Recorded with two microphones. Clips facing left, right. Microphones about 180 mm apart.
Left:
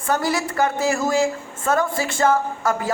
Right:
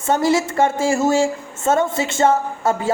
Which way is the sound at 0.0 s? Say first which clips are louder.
Right 5 dB; 25° right (ahead or behind).